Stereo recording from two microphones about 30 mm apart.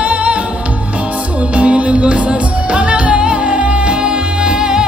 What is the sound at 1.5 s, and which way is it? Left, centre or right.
Music, right.